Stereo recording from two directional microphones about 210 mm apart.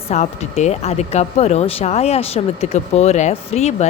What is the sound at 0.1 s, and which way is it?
Speech, 30° left (ahead or behind).